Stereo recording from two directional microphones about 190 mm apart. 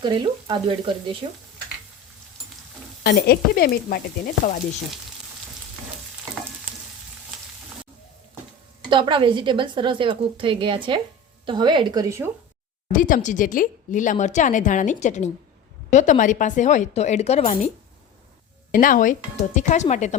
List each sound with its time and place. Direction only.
0.0 s a woman's voice: 25° right (ahead or behind)
3.0 s stir: 55° left (ahead or behind)
8.9 s a woman's voice: 25° right (ahead or behind)
12.9 s speech: 45° left (ahead or behind)
18.7 s speech: 45° left (ahead or behind)